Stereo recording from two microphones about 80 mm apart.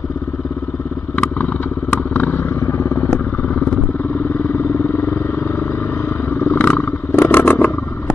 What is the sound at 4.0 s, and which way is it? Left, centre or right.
Vehicle, left.